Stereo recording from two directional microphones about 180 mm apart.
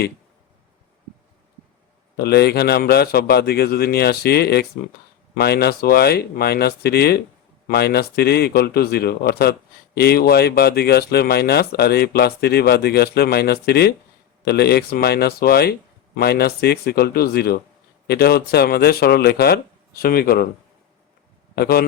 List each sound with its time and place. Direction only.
2.1 s speech: 65° left (ahead or behind)
21.5 s a man's voice: 60° left (ahead or behind)